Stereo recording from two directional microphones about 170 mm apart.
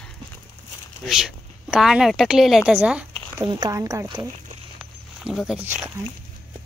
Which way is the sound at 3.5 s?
20° right (ahead or behind).